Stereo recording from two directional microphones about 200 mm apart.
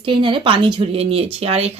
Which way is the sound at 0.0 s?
25° right (ahead or behind).